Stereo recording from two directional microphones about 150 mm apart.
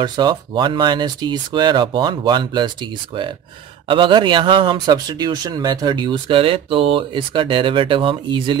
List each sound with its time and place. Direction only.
0.0 s speech: 30° right (ahead or behind)
3.8 s speech: 35° right (ahead or behind)